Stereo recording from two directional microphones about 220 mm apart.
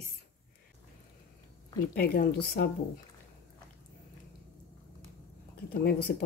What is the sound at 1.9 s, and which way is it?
Speech, 40° left (ahead or behind).